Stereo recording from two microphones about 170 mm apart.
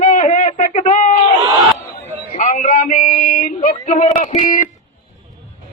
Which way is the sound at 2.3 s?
45° left (ahead or behind).